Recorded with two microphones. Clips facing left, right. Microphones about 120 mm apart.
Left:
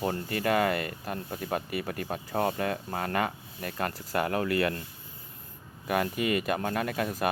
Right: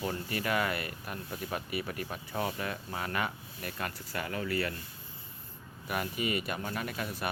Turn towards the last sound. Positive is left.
turn(degrees=50)  # may be behind; listen again after turning